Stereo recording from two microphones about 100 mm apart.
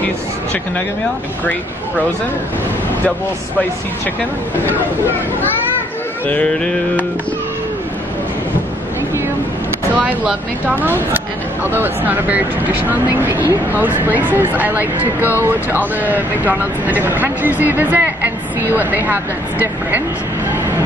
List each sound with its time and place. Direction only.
6.2 s music: 15° left (ahead or behind)
9.9 s speech: 15° right (ahead or behind)